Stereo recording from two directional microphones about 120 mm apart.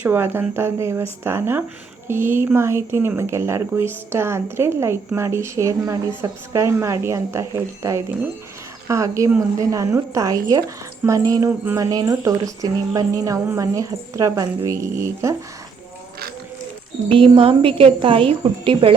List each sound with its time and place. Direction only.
0.0 s a woman's voice: 20° right (ahead or behind)
17.1 s speech: 50° right (ahead or behind)